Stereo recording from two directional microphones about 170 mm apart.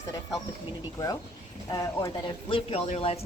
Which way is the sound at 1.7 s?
20° left (ahead or behind).